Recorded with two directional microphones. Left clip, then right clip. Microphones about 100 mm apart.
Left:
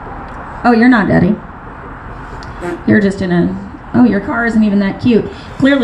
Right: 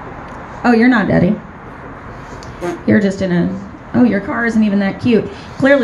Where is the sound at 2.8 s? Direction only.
20° right (ahead or behind).